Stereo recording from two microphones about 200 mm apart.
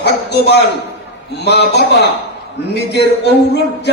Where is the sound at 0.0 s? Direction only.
55° left (ahead or behind).